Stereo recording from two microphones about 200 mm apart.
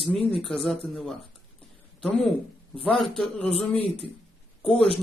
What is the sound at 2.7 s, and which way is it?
Speech, centre (ahead or behind).